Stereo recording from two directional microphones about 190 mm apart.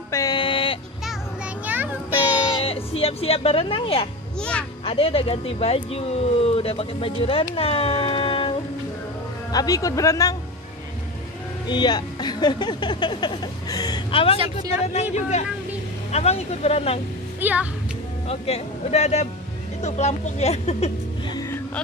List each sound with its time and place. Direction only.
0.1 s a sound: 20° left (ahead or behind)
1.0 s children playing: 5° right (ahead or behind)
3.0 s speech: 30° left (ahead or behind)
4.4 s a child's voice: 5° left (ahead or behind)
4.8 s speech: 30° left (ahead or behind)
11.6 s speech: 25° left (ahead or behind)
17.4 s speech: 10° right (ahead or behind)
18.3 s speech: 35° left (ahead or behind)
21.3 s music: 20° left (ahead or behind)